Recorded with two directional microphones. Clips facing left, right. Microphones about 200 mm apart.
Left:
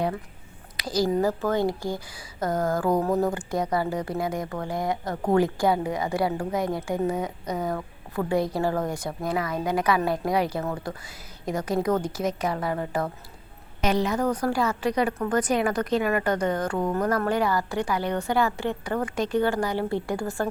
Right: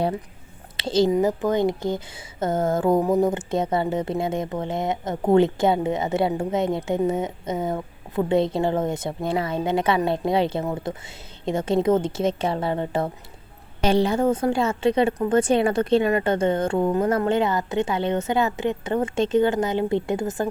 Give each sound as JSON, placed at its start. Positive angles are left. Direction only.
{"t": 0.8, "sound": "speech", "side_deg": -25}